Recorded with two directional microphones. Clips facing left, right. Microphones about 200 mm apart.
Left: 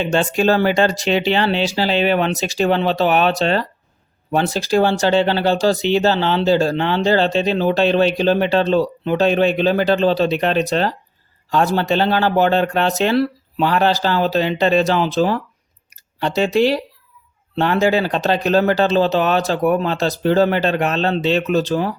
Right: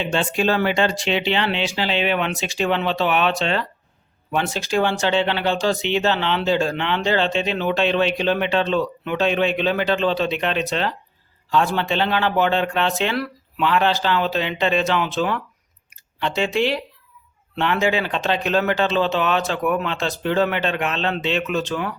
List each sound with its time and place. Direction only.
0.0 s speech: 40° left (ahead or behind)